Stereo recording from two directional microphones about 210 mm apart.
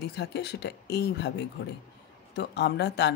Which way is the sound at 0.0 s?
50° left (ahead or behind).